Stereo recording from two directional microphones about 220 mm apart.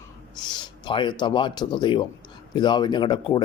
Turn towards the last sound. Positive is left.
turn(degrees=20)  # may be behind; listen again after turning